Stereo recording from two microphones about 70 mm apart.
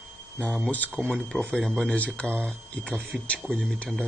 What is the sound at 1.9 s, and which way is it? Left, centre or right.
Speech, centre.